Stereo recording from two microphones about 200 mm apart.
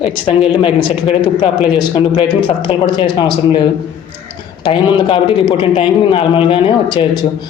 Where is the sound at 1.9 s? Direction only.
30° left (ahead or behind).